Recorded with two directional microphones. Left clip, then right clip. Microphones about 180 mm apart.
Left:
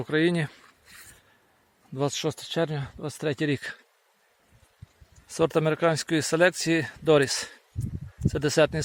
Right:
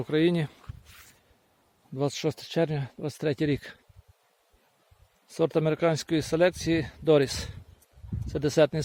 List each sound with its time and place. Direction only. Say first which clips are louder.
0.0 s speech: left 1 dB; 15° right (ahead or behind)
2.0 s speech: left 1 dB; 15° right (ahead or behind)
5.3 s speech: left 2 dB; 5° right (ahead or behind)
5.7 s speech: left 2 dB; 15° right (ahead or behind)